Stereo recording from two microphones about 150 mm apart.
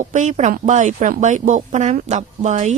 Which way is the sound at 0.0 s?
55° right (ahead or behind).